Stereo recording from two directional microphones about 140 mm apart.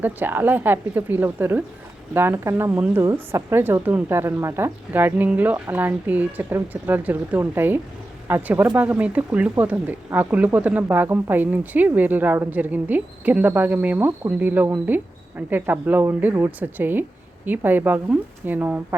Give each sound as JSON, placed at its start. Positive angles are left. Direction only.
{"t": 0.0, "sound": "speech", "side_deg": -15}